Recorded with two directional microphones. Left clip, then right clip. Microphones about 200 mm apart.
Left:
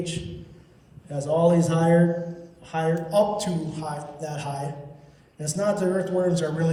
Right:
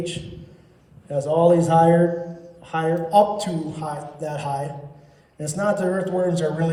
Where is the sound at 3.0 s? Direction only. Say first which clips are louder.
Right 6 dB; 35° right (ahead or behind).